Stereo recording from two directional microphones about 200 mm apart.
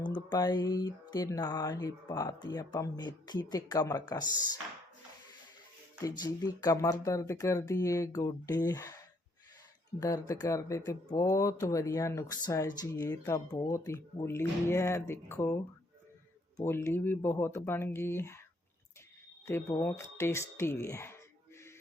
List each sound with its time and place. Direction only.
0.0 s a sound: 20° left (ahead or behind)
6.0 s speech: 15° left (ahead or behind)
10.0 s speech: 15° left (ahead or behind)
16.6 s speech: 10° left (ahead or behind)
19.5 s speech: 10° left (ahead or behind)